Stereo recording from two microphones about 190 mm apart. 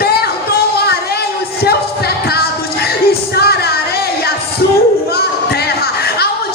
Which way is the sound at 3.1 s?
55° left (ahead or behind).